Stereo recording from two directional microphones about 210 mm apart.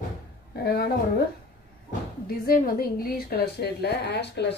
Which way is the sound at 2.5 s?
45° left (ahead or behind).